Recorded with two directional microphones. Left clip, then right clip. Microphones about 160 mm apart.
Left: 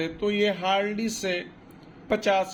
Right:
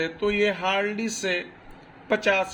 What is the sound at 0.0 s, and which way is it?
Speech, 5° right (ahead or behind).